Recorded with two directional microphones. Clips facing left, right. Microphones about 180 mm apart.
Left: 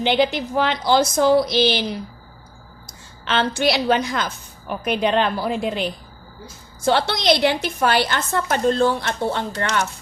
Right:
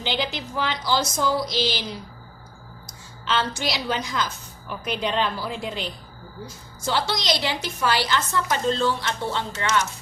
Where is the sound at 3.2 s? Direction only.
60° left (ahead or behind).